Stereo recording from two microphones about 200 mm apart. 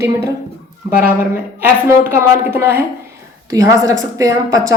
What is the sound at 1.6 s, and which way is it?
Speech, 10° right (ahead or behind).